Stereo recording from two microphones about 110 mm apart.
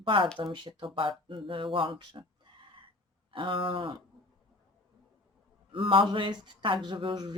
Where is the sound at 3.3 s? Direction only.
50° right (ahead or behind).